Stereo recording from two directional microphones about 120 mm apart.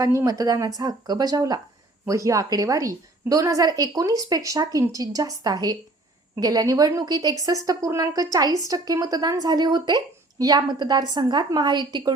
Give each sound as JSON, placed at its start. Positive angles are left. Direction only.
{"t": 0.0, "sound": "a woman's voice", "side_deg": -25}